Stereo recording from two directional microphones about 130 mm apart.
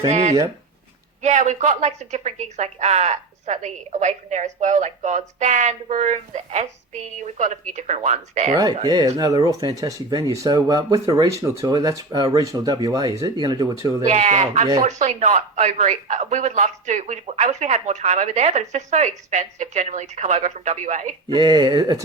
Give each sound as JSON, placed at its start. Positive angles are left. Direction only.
{"t": 0.1, "sound": "speech", "side_deg": -65}
{"t": 8.5, "sound": "speech", "side_deg": -30}
{"t": 14.0, "sound": "speech", "side_deg": -65}
{"t": 21.2, "sound": "speech", "side_deg": -35}